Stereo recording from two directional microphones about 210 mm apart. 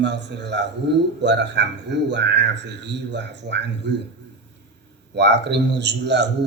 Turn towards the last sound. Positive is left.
turn(degrees=-55)  # may be behind; listen again after turning